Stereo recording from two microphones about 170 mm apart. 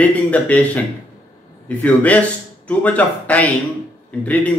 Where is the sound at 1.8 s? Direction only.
10° left (ahead or behind).